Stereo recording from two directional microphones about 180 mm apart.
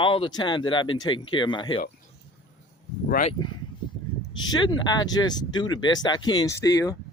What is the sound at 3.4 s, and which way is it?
Speech, 20° left (ahead or behind).